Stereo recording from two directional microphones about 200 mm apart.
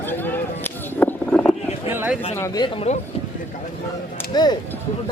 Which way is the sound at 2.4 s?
20° left (ahead or behind).